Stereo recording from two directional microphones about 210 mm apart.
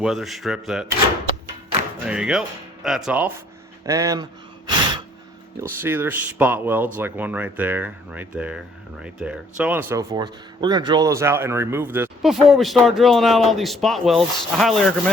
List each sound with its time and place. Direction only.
0.0 s speech: centre (ahead or behind)
2.0 s speech: 5° right (ahead or behind)
5.6 s speech: 10° right (ahead or behind)